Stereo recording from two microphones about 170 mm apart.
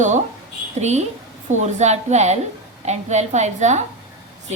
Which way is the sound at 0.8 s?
40° right (ahead or behind).